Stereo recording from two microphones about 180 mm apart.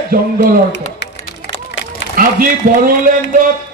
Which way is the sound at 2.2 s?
50° right (ahead or behind).